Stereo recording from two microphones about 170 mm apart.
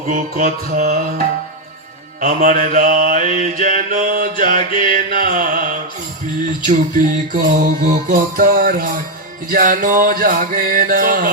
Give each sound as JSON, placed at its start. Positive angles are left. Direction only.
{"t": 0.1, "sound": "music", "side_deg": -50}
{"t": 2.4, "sound": "mantra", "side_deg": -50}